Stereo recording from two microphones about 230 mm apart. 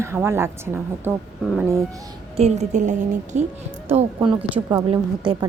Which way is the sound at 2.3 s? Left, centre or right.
Right.